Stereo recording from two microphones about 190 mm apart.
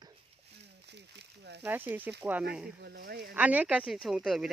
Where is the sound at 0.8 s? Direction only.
60° right (ahead or behind).